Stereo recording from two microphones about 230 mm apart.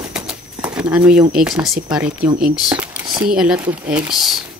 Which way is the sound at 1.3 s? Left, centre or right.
Centre.